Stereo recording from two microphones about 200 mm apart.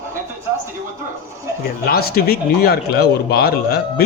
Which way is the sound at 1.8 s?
50° left (ahead or behind).